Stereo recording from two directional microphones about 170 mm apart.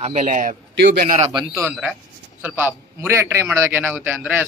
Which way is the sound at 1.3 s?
20° right (ahead or behind).